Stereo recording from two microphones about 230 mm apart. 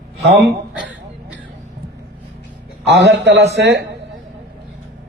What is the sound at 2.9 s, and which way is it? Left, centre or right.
Speech, right.